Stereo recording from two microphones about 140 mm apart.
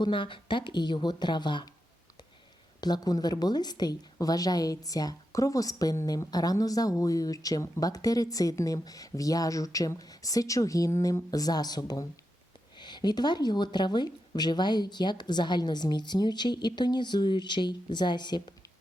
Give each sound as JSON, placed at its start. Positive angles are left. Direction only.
{"t": 0.0, "sound": "speech", "side_deg": 35}
{"t": 2.8, "sound": "a woman's voice", "side_deg": 30}